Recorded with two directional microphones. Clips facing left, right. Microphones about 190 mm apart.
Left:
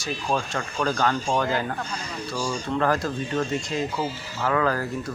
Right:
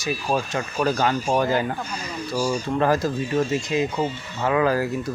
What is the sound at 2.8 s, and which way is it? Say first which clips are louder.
Speech: right 3 dB; 20° right (ahead or behind).